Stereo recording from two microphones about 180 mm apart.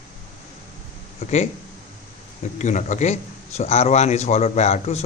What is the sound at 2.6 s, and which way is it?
Speech, 40° left (ahead or behind).